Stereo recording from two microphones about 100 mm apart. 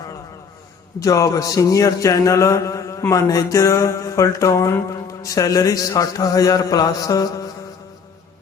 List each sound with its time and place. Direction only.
0.9 s speech: 35° left (ahead or behind)